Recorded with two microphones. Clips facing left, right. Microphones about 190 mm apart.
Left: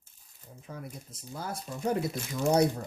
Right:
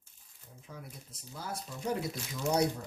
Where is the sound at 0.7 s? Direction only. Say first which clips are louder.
Left 6 dB; 50° left (ahead or behind).